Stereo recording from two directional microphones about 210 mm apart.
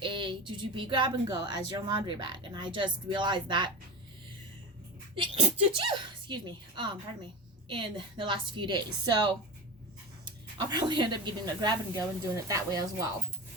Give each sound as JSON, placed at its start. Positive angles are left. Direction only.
{"t": 0.0, "sound": "speech", "side_deg": -25}
{"t": 5.1, "sound": "speech", "side_deg": -25}